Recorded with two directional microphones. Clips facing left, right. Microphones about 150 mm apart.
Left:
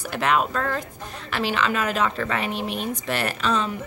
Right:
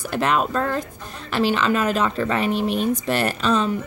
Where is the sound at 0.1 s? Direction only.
35° right (ahead or behind).